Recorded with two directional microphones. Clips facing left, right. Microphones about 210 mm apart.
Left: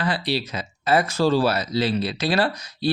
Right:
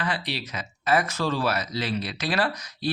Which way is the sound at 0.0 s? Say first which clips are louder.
Left 6 dB; 35° left (ahead or behind).